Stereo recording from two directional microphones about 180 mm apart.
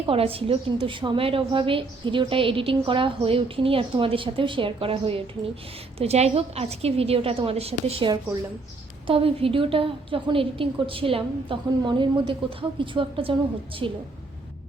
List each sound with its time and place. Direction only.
0.0 s a woman's voice: 30° right (ahead or behind)